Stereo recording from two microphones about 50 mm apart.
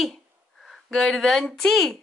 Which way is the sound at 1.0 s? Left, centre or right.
Centre.